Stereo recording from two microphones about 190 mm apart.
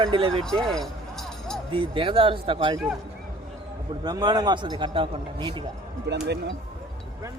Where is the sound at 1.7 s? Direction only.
25° right (ahead or behind).